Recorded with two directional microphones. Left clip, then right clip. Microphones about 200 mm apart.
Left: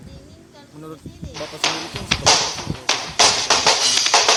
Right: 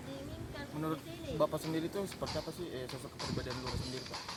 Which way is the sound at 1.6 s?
50° left (ahead or behind).